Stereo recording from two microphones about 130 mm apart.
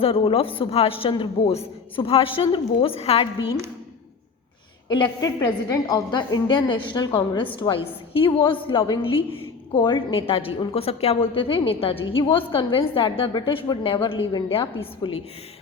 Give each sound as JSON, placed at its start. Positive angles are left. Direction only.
{"t": 0.0, "sound": "a woman's voice", "side_deg": 45}
{"t": 4.9, "sound": "a woman's voice", "side_deg": 35}